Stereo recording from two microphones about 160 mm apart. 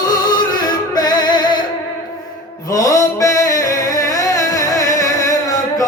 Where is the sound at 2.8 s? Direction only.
20° left (ahead or behind).